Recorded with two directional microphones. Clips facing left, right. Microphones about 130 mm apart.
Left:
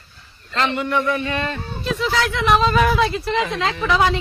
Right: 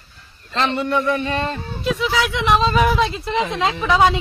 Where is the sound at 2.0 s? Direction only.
10° right (ahead or behind).